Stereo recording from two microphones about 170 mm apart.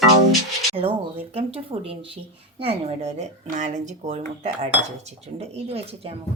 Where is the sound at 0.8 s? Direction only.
35° right (ahead or behind).